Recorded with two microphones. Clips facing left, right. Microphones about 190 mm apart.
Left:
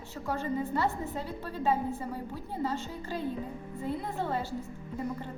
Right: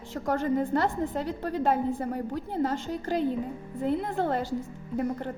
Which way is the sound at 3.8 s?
75° right (ahead or behind).